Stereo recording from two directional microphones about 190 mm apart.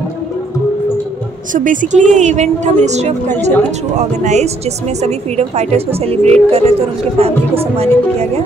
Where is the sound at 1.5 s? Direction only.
45° right (ahead or behind).